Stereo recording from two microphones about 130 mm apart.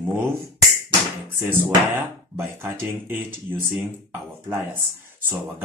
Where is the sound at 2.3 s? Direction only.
15° right (ahead or behind).